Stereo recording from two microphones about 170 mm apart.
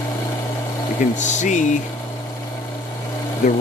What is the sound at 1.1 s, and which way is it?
Speech, 45° left (ahead or behind).